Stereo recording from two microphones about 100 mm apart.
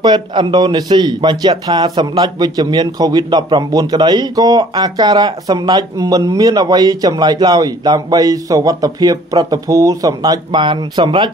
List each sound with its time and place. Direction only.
0.0 s speech: 50° right (ahead or behind)
10.6 s speech: 50° right (ahead or behind)